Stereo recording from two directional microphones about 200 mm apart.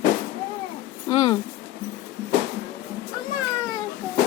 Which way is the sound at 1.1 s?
20° left (ahead or behind).